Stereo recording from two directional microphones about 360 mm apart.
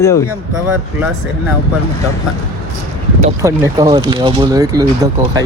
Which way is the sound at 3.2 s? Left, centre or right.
Centre.